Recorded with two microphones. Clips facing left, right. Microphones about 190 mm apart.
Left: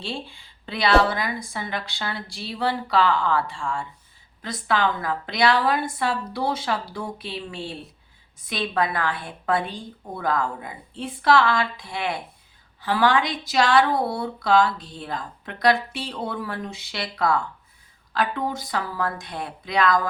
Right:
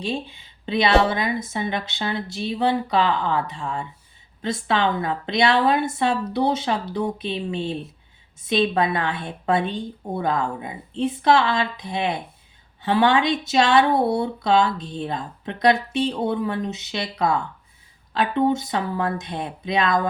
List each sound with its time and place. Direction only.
0.0 s speech: 20° right (ahead or behind)